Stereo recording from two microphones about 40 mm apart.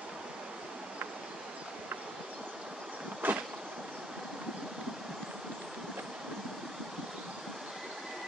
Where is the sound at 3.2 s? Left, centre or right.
Right.